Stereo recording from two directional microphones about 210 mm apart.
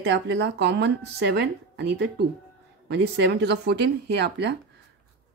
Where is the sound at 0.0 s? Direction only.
55° right (ahead or behind).